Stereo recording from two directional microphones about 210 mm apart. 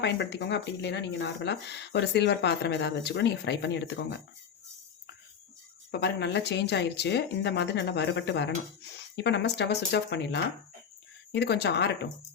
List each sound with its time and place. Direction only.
0.0 s speech: 55° left (ahead or behind)
5.9 s speech: 50° left (ahead or behind)